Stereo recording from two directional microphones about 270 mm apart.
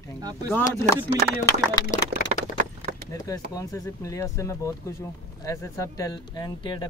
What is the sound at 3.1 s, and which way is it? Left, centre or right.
Speech, centre.